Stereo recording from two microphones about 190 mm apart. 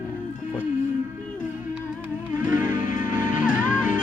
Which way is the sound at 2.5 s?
45° left (ahead or behind).